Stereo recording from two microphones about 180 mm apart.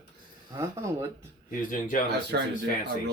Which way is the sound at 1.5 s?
50° left (ahead or behind).